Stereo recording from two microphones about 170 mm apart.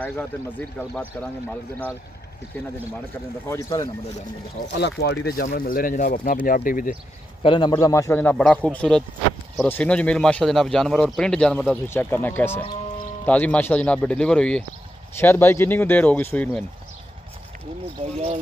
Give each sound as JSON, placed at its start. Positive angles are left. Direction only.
{"t": 0.0, "sound": "speech", "side_deg": 10}
{"t": 3.4, "sound": "speech", "side_deg": 20}
{"t": 4.6, "sound": "speech", "side_deg": 85}
{"t": 7.4, "sound": "a man's voice", "side_deg": 30}
{"t": 7.7, "sound": "speech", "side_deg": 20}